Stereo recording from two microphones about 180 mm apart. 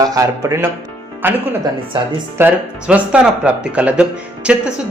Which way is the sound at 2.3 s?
10° right (ahead or behind).